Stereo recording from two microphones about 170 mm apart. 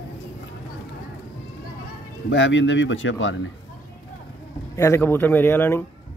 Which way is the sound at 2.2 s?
90° left.